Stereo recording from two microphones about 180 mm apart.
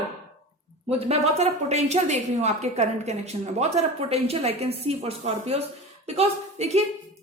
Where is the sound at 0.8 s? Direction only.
35° right (ahead or behind).